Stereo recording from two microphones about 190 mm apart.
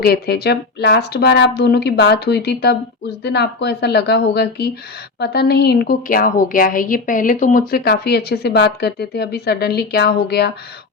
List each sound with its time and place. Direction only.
0.0 s a woman's voice: 55° left (ahead or behind)